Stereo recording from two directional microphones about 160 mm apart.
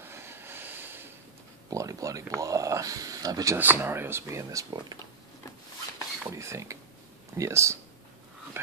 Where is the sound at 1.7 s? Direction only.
20° right (ahead or behind).